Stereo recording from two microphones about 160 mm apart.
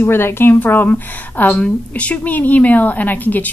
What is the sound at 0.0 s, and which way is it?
A woman's voice, 15° left (ahead or behind).